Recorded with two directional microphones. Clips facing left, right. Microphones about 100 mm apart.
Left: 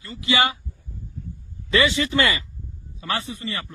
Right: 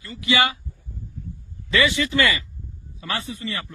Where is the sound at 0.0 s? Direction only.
25° left (ahead or behind).